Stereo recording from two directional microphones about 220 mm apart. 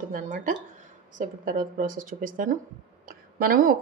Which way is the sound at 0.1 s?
35° right (ahead or behind).